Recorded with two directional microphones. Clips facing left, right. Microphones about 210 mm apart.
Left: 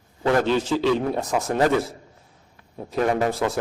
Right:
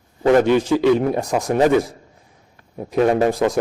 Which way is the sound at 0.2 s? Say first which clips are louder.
Right 6 dB; 20° right (ahead or behind).